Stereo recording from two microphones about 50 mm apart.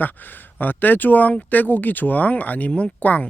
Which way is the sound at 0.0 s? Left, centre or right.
Left.